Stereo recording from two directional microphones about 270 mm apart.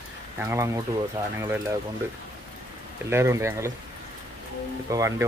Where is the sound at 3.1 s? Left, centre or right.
Centre.